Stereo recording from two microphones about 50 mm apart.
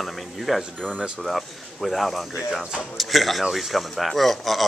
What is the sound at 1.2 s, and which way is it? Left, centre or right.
Speech, centre.